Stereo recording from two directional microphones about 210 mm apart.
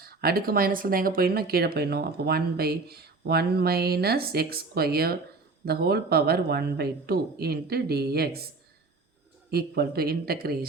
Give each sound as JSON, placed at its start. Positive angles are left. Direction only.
{"t": 0.0, "sound": "speech", "side_deg": -45}
{"t": 9.5, "sound": "speech", "side_deg": -50}